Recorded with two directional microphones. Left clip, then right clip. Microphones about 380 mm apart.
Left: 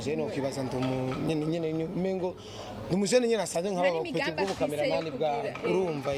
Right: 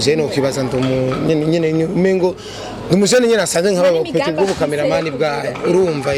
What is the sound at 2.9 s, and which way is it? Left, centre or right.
A man's voice, centre.